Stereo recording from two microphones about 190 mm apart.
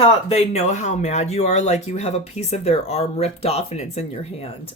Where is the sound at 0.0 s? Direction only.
35° left (ahead or behind).